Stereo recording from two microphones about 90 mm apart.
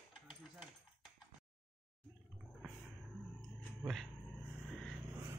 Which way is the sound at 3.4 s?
5° left (ahead or behind).